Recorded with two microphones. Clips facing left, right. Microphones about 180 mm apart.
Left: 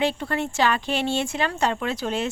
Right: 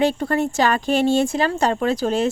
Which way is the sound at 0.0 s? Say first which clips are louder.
Right 5 dB; 45° right (ahead or behind).